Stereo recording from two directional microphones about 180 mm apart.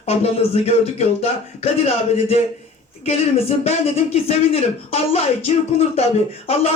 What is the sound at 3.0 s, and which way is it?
Speech, 35° left (ahead or behind).